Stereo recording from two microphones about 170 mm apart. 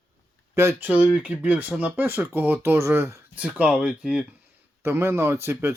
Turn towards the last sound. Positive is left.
turn(degrees=-15)  # may be behind; listen again after turning